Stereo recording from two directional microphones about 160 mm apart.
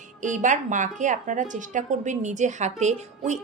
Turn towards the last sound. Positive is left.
turn(degrees=-45)  # may be behind; listen again after turning